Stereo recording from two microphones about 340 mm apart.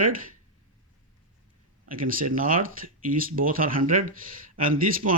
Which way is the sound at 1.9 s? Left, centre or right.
Right.